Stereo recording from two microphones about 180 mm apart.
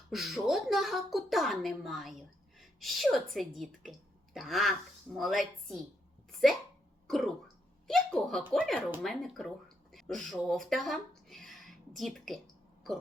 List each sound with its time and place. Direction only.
0.1 s a woman's voice: centre (ahead or behind)
7.1 s a sound: centre (ahead or behind)
8.5 s a woman's voice: 5° left (ahead or behind)